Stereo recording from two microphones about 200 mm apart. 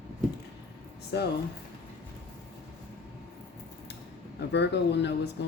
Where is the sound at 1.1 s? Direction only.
60° left (ahead or behind).